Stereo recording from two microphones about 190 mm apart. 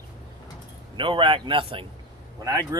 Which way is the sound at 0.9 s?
25° right (ahead or behind).